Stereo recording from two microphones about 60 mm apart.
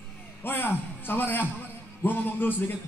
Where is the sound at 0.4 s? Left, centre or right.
Left.